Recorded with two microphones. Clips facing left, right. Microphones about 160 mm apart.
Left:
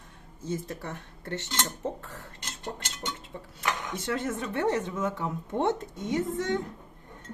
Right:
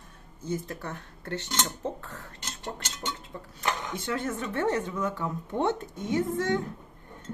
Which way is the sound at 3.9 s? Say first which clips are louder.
Even; 25° left (ahead or behind).